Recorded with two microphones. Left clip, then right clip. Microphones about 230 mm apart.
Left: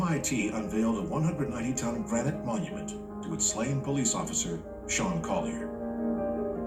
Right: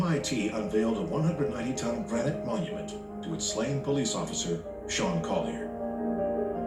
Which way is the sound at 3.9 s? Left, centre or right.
Left.